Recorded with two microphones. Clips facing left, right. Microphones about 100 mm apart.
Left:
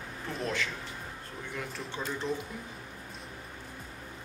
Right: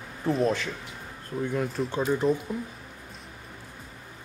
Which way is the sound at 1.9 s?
45° right (ahead or behind).